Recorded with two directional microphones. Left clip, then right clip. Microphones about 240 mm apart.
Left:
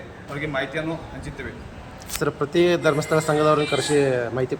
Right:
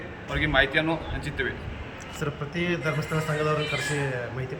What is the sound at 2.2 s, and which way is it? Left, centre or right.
Speech, left.